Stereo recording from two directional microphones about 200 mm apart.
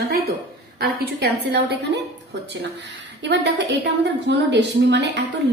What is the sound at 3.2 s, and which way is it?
A woman's voice, 60° right (ahead or behind).